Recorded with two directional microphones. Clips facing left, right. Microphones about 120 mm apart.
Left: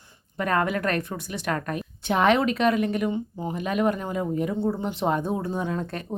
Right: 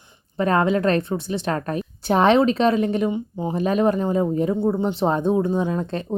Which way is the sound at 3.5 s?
35° right (ahead or behind).